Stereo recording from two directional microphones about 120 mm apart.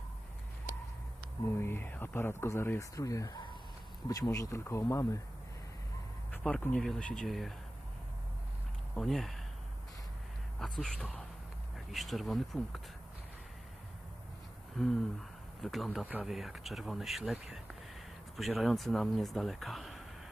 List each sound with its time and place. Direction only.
1.5 s speech: 20° left (ahead or behind); by 3.6 s 40° left (ahead or behind)
4.1 s speech: 30° left (ahead or behind)
6.3 s speech: 10° left (ahead or behind)
9.0 s speech: centre (ahead or behind)
10.6 s speech: 5° left (ahead or behind)
14.8 s speech: centre (ahead or behind)